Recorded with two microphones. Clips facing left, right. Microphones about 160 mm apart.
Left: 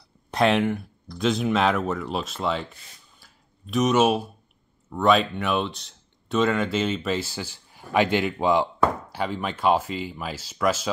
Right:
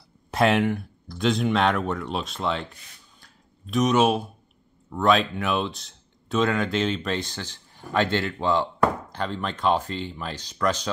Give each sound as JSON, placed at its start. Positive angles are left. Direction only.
{"t": 0.3, "sound": "speech", "side_deg": 0}
{"t": 3.2, "sound": "a sound", "side_deg": 0}
{"t": 4.8, "sound": "speech", "side_deg": 0}